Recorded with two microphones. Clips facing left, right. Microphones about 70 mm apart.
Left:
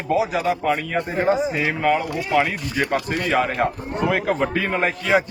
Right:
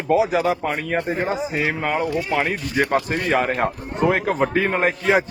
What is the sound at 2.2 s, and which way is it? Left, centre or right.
Speech, right.